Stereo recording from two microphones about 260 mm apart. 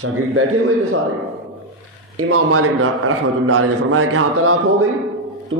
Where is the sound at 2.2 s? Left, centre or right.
Right.